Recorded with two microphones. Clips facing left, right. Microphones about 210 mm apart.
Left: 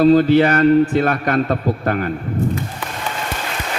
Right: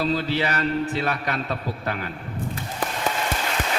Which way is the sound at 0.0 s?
50° left (ahead or behind).